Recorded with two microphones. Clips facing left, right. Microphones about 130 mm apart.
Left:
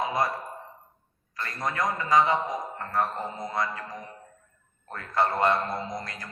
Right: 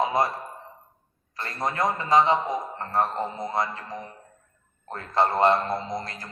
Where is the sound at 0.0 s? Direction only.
25° right (ahead or behind).